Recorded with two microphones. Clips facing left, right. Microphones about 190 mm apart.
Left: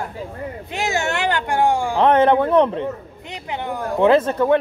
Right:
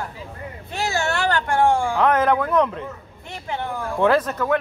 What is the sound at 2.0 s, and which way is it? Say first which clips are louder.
Speech: left 7 dB; 30° left (ahead or behind).